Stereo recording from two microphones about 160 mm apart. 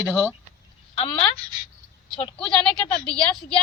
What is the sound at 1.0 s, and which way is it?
Speech, 35° left (ahead or behind).